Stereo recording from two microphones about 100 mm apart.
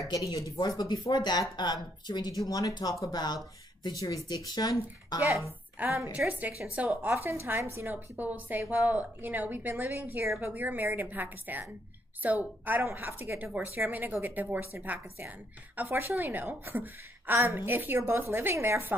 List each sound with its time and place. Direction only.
0.1 s speech: 35° left (ahead or behind)
0.6 s speech: 45° left (ahead or behind)
5.8 s a woman's voice: 15° right (ahead or behind)
7.0 s a woman's voice: 25° right (ahead or behind)